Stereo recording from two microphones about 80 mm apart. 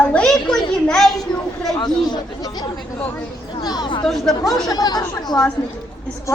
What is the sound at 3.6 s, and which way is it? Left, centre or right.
Speech, left.